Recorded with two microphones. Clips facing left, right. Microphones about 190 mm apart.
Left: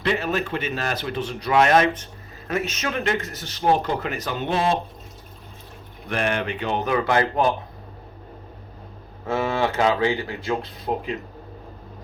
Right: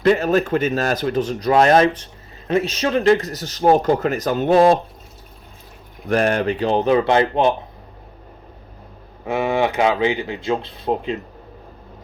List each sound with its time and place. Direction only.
0.0 s speech: 45° right (ahead or behind)
6.1 s speech: 40° right (ahead or behind); by 7.5 s 25° right (ahead or behind)
9.2 s speech: 15° right (ahead or behind)